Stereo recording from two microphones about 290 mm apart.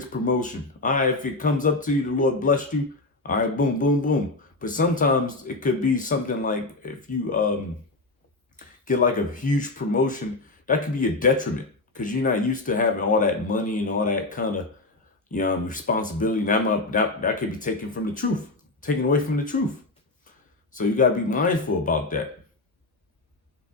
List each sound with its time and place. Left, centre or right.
0.3 s speech: left
8.5 s speech: left
20.7 s speech: left